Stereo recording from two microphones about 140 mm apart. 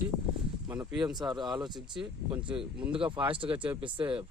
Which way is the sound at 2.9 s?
35° right (ahead or behind).